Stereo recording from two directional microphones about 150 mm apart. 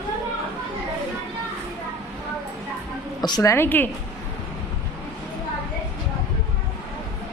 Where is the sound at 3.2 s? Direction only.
25° left (ahead or behind).